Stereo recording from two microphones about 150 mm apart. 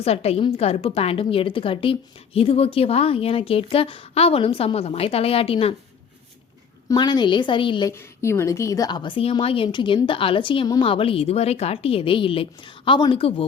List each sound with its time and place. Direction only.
0.0 s a woman's voice: 45° left (ahead or behind)
6.8 s a woman's voice: 25° left (ahead or behind)
7.9 s a woman's voice: 20° left (ahead or behind); by 13.4 s 35° left (ahead or behind)